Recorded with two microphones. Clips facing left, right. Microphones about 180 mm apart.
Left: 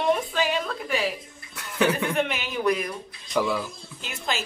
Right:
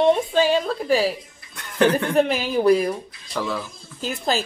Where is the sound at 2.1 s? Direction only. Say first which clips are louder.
Right 7 dB; 35° right (ahead or behind).